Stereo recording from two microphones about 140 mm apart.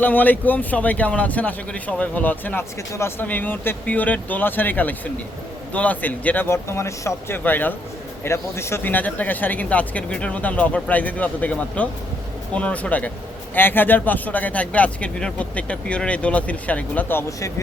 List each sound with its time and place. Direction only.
0.0 s a man's voice: 10° left (ahead or behind)